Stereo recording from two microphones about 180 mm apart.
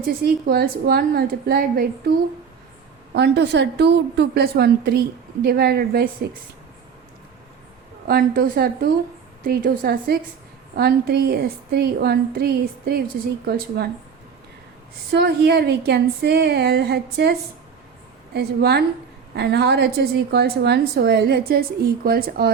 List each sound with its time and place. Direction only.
0.0 s a woman's voice: 60° right (ahead or behind)
3.2 s a woman's voice: 75° right (ahead or behind)
8.0 s a woman's voice: 55° right (ahead or behind)
15.1 s a woman's voice: 65° right (ahead or behind)
18.3 s a woman's voice: 65° right (ahead or behind)